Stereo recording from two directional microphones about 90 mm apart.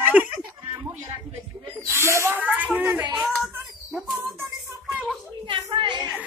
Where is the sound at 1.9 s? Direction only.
30° right (ahead or behind).